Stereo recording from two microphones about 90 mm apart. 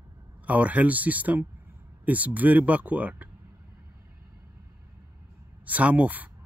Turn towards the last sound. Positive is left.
turn(degrees=-15)  # may be behind; listen again after turning